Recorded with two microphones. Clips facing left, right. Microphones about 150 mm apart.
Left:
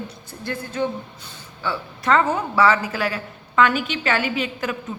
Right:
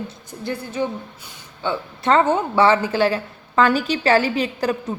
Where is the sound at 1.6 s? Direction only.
25° right (ahead or behind).